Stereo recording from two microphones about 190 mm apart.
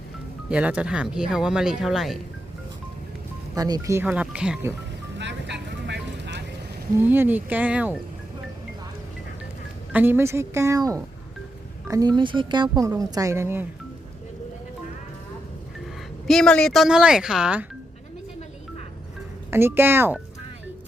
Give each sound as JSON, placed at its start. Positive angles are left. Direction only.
{"t": 0.5, "sound": "speech", "side_deg": -5}
{"t": 3.5, "sound": "speech", "side_deg": -20}
{"t": 5.1, "sound": "vehicle", "side_deg": -65}
{"t": 6.9, "sound": "speech", "side_deg": -10}
{"t": 9.9, "sound": "speech", "side_deg": -10}
{"t": 16.2, "sound": "speech", "side_deg": 5}
{"t": 19.5, "sound": "speech", "side_deg": -10}